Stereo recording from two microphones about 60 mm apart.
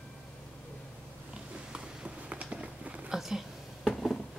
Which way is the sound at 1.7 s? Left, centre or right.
Centre.